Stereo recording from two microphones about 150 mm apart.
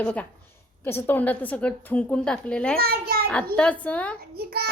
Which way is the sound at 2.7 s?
90° right.